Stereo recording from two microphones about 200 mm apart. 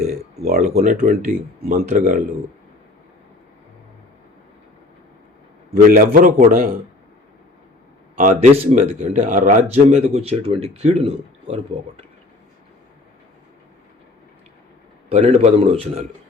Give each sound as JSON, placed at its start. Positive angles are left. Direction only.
{"t": 0.0, "sound": "a sound", "side_deg": -35}
{"t": 0.6, "sound": "a man's voice", "side_deg": -35}
{"t": 5.7, "sound": "a man's voice", "side_deg": -45}
{"t": 8.1, "sound": "speech", "side_deg": -40}
{"t": 15.1, "sound": "speech", "side_deg": -30}